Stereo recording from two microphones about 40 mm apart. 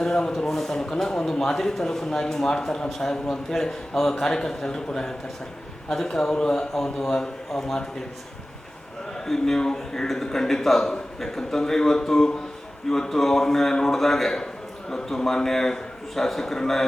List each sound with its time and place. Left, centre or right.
0.0 s speech: centre
9.1 s speech: centre